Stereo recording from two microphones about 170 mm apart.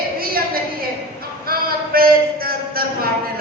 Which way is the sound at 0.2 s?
60° right (ahead or behind).